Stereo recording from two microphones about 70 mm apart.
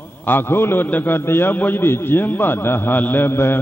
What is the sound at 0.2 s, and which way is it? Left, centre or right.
A man's voice, left.